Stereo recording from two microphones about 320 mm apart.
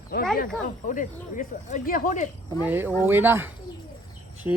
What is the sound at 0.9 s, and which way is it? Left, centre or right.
Speech, left.